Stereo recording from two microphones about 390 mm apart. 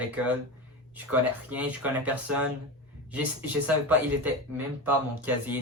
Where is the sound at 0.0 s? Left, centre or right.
Centre.